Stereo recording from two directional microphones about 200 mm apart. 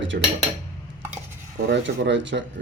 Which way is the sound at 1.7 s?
60° right (ahead or behind).